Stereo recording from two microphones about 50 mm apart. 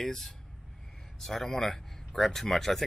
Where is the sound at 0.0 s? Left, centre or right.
Centre.